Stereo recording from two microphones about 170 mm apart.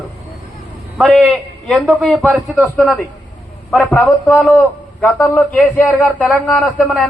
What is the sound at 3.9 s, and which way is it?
A man's voice, 10° left (ahead or behind).